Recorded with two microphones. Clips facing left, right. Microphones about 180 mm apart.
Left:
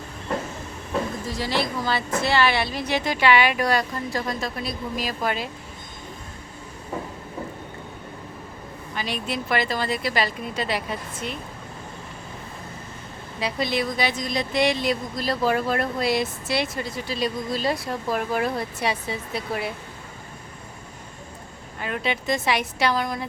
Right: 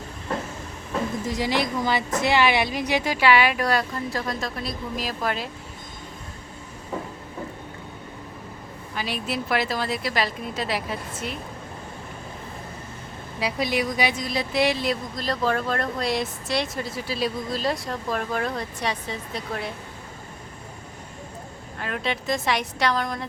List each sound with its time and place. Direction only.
1.2 s a woman's voice: 20° right (ahead or behind); by 5.5 s centre (ahead or behind)
9.0 s speech: 5° right (ahead or behind)
13.4 s speech: 10° right (ahead or behind); by 19.7 s 5° left (ahead or behind)
21.8 s speech: centre (ahead or behind)